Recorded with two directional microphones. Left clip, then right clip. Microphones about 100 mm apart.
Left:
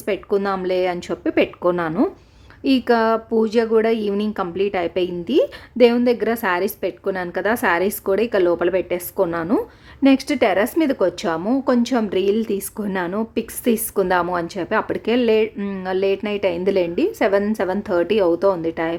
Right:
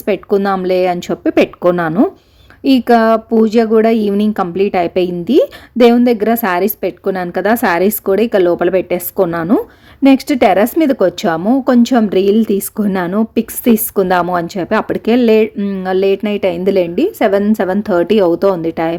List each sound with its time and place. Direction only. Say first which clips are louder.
0.0 s a woman's voice: right 7 dB; 45° right (ahead or behind)
15.5 s speech: right 7 dB; 25° right (ahead or behind)
15.8 s a woman's voice: right 7 dB; 40° right (ahead or behind)